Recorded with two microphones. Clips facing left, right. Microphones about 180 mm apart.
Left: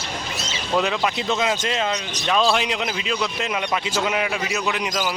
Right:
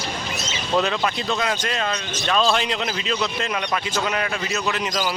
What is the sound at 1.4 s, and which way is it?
Speech, 20° left (ahead or behind).